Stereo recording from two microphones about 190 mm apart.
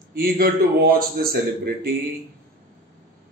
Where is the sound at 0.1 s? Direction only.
50° right (ahead or behind).